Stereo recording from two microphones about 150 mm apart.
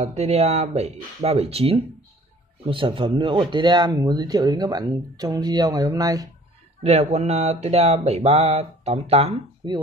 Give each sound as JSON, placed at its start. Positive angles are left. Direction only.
{"t": 0.0, "sound": "speech", "side_deg": -45}
{"t": 6.8, "sound": "speech", "side_deg": -45}